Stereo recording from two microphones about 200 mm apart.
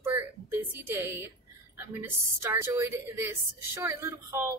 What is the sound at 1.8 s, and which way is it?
A woman's voice, 10° right (ahead or behind).